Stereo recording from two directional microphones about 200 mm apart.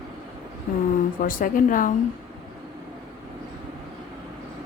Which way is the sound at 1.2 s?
45° left (ahead or behind).